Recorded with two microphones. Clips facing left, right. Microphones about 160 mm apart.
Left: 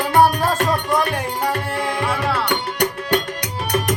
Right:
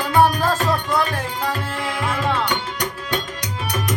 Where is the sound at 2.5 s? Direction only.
65° left (ahead or behind).